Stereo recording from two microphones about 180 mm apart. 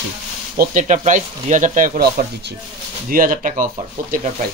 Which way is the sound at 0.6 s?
45° right (ahead or behind).